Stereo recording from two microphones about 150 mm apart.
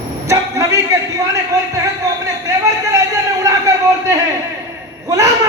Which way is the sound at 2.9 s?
25° right (ahead or behind).